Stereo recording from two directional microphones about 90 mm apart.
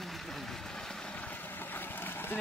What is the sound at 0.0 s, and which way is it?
Vehicle, centre (ahead or behind).